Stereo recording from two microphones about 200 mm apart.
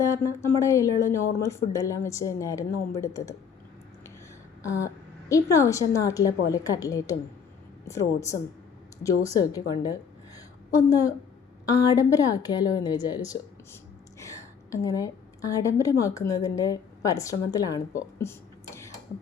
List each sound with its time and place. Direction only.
0.0 s a woman's voice: 15° left (ahead or behind)
4.6 s a woman's voice: 15° left (ahead or behind)
18.2 s a sound: 15° left (ahead or behind)